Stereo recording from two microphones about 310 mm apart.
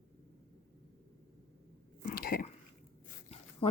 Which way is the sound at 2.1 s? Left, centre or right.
Left.